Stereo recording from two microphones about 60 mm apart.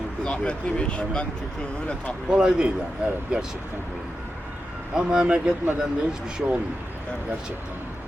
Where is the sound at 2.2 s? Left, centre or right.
Centre.